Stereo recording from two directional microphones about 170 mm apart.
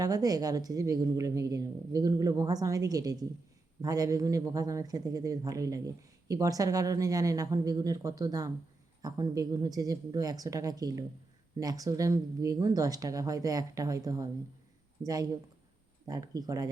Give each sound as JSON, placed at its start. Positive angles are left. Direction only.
{"t": 0.0, "sound": "speech", "side_deg": -20}